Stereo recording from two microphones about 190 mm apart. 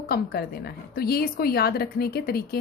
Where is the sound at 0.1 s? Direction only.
55° left (ahead or behind).